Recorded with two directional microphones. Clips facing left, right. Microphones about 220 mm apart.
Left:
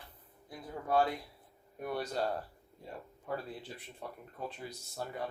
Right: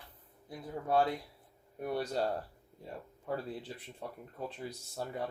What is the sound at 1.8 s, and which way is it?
Speech, 30° right (ahead or behind).